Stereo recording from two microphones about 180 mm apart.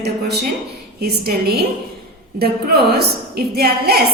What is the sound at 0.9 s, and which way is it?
A woman's voice, 60° right (ahead or behind).